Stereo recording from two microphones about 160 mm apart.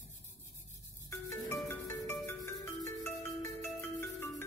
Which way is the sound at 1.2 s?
15° left (ahead or behind).